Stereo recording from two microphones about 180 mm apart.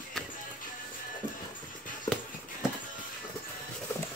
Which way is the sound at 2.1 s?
15° left (ahead or behind).